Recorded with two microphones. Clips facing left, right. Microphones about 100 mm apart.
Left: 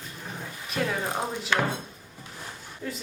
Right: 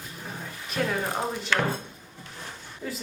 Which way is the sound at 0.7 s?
Centre (ahead or behind).